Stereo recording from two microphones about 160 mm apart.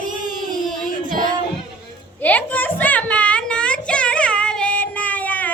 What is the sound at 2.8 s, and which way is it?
Child singing, 10° left (ahead or behind).